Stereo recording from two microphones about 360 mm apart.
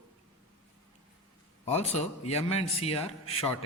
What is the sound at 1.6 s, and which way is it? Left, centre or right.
A man's voice, centre.